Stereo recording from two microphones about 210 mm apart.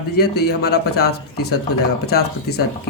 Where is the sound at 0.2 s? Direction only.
50° left (ahead or behind).